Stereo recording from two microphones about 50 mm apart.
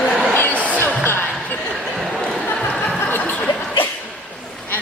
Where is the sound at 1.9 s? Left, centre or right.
Centre.